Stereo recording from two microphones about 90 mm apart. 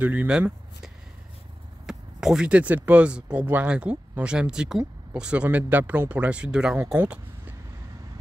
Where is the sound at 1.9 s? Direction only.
5° right (ahead or behind).